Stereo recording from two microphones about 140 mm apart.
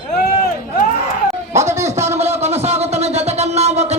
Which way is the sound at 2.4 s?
50° right (ahead or behind).